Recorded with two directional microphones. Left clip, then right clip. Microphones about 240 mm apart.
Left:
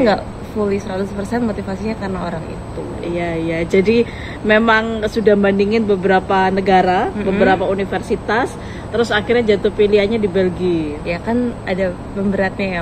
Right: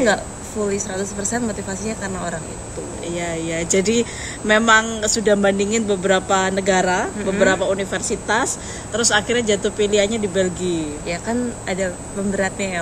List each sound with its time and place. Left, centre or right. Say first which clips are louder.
0.7 s speech: left 2 dB; centre
3.2 s speech: left 4 dB; right
7.2 s speech: left 2 dB; centre
7.4 s speech: left 2 dB; centre
11.1 s speech: left 4 dB; centre